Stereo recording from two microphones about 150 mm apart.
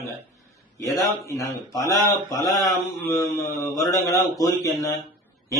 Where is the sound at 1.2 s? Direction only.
20° left (ahead or behind).